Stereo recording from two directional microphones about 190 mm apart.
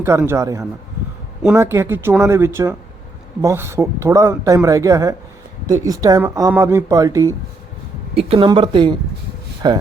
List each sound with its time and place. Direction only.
0.0 s speech: 10° right (ahead or behind)
8.1 s speech: 30° right (ahead or behind)